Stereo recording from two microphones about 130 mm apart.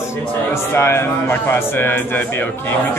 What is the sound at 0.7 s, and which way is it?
Speech, 20° left (ahead or behind).